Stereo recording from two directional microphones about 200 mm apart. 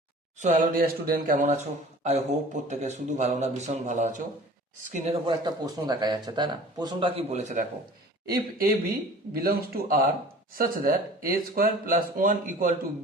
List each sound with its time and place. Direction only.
0.3 s speech: 40° right (ahead or behind)
5.2 s speech: 20° right (ahead or behind)
8.3 s speech: 50° right (ahead or behind)